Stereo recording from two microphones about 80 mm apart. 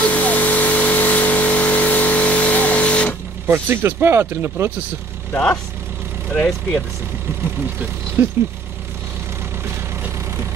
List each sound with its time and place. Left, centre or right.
0.0 s vehicle: centre
3.4 s speech: right
6.3 s speech: centre
8.2 s speech: right